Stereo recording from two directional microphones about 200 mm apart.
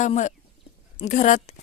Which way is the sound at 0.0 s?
35° left (ahead or behind).